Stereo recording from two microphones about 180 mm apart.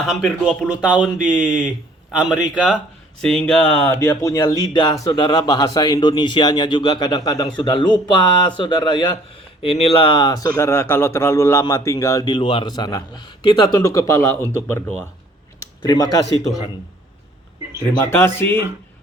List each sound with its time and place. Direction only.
0.0 s speech: centre (ahead or behind)
18.0 s speech: 15° left (ahead or behind)